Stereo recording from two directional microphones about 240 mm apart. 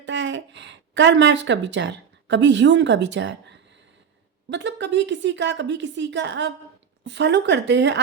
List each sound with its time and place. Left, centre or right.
0.0 s a woman's voice: right